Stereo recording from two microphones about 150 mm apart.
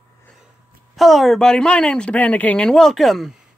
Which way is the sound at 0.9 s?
Centre (ahead or behind).